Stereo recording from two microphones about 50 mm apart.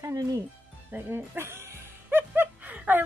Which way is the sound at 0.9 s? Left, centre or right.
Right.